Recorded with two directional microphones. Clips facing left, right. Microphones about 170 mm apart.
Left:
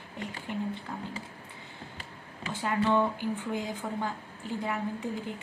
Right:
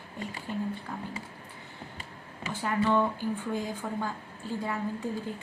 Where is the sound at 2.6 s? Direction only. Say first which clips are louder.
Even; 20° left (ahead or behind).